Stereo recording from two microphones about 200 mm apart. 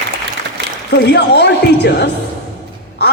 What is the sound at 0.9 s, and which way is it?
A man's voice, 55° left (ahead or behind).